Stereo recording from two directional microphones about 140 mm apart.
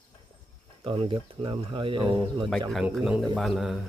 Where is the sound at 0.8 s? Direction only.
40° right (ahead or behind).